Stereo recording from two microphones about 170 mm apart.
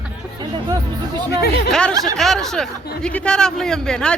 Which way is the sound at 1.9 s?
20° right (ahead or behind).